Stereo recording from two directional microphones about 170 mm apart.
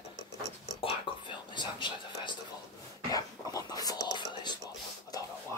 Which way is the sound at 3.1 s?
20° left (ahead or behind).